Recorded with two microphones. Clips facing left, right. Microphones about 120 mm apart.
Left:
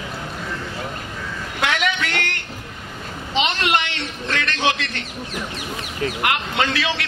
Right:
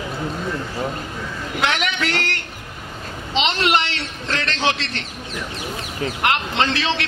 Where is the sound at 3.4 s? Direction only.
30° right (ahead or behind).